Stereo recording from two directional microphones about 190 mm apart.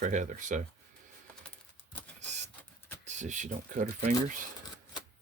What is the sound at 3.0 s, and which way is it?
Speech, 40° right (ahead or behind).